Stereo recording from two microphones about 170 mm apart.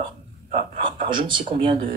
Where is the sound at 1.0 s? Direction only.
30° right (ahead or behind).